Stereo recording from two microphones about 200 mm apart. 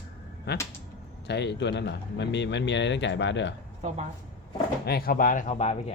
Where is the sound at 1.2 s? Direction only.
60° left (ahead or behind).